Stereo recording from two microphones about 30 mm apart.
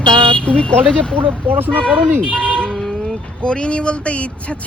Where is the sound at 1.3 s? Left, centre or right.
Right.